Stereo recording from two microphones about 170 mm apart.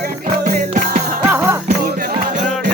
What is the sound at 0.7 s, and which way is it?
Music, 50° right (ahead or behind).